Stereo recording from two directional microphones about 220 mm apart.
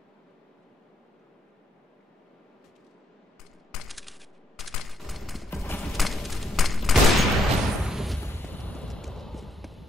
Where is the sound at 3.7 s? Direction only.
Centre (ahead or behind).